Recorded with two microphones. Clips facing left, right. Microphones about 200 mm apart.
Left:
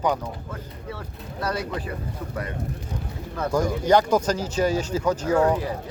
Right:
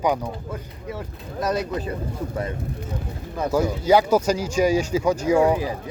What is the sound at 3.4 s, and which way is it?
Speech, 10° right (ahead or behind).